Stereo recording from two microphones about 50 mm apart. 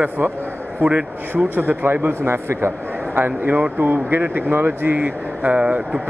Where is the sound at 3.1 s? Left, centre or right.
Right.